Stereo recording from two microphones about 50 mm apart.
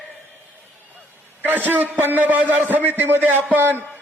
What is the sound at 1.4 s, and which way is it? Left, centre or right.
A man's voice, right.